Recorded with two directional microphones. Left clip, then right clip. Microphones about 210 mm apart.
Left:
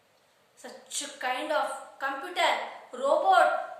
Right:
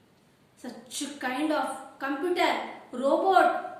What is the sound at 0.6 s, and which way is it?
A woman's voice, 15° left (ahead or behind).